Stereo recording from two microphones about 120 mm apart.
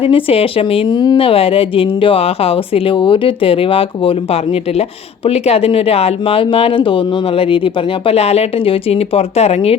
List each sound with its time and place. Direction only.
0.0 s speech: 50° left (ahead or behind)
0.9 s speech: 40° left (ahead or behind); by 9.7 s 60° left (ahead or behind)